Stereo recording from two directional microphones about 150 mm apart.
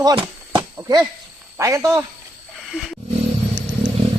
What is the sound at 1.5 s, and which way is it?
Speech, 20° right (ahead or behind).